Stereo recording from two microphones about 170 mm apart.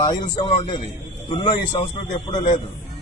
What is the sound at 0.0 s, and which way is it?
A man's voice, 30° left (ahead or behind).